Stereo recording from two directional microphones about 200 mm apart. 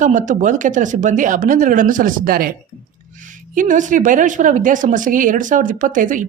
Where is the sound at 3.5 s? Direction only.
40° right (ahead or behind).